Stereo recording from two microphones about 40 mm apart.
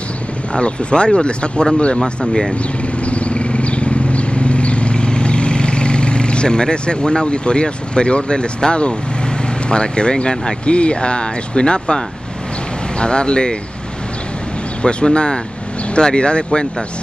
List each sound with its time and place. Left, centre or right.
0.6 s speech: left
3.1 s vehicle: left
9.7 s speech: left
13.0 s speech: left
14.8 s speech: left